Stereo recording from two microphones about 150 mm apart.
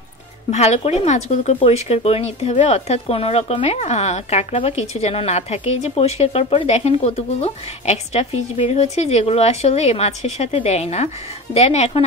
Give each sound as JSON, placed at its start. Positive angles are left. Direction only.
{"t": 0.5, "sound": "speech", "side_deg": 45}